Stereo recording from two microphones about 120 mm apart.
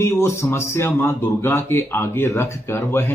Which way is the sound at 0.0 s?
25° left (ahead or behind).